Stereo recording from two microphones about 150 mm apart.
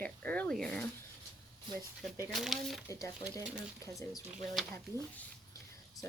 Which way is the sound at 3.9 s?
Centre (ahead or behind).